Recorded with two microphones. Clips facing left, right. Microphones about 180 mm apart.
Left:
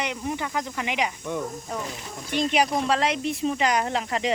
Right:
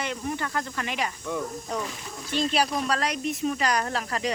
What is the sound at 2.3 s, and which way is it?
Speech, 20° left (ahead or behind).